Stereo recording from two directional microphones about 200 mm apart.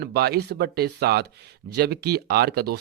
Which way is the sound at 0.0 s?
55° right (ahead or behind).